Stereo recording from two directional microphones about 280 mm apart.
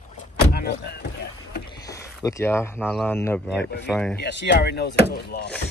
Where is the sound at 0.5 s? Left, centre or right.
Left.